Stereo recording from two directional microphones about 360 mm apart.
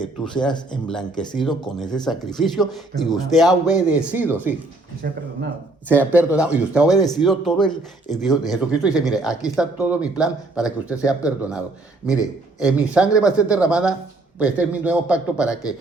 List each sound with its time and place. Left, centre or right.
0.0 s speech: centre
5.0 s speech: right
5.9 s speech: centre